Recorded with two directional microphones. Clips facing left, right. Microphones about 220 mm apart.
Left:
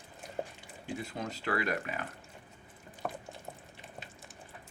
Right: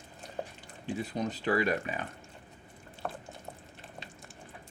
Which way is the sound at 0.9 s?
20° right (ahead or behind).